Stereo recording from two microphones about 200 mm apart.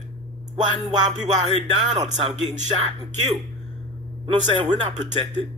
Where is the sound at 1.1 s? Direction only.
30° right (ahead or behind).